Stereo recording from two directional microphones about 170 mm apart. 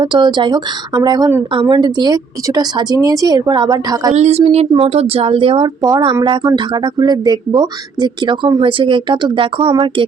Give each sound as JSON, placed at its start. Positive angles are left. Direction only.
{"t": 0.0, "sound": "speech", "side_deg": -25}
{"t": 4.1, "sound": "speech", "side_deg": -40}